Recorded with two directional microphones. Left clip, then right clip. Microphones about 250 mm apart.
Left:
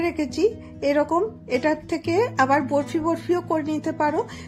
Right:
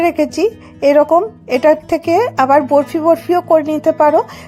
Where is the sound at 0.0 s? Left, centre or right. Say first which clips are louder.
Right 9 dB; right.